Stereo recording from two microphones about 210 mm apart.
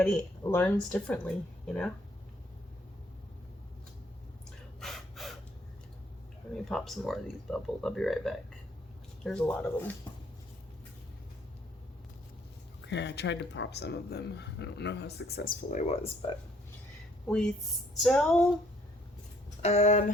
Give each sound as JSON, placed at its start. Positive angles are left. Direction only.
{"t": 0.0, "sound": "speech", "side_deg": 10}
{"t": 4.8, "sound": "gasp", "side_deg": 0}
{"t": 6.7, "sound": "speech", "side_deg": 0}
{"t": 12.8, "sound": "speech", "side_deg": 55}
{"t": 15.9, "sound": "speech", "side_deg": 25}
{"t": 17.2, "sound": "speech", "side_deg": 5}
{"t": 19.6, "sound": "speech", "side_deg": 30}